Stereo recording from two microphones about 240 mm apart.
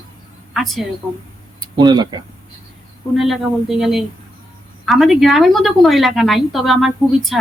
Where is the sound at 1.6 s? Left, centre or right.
Centre.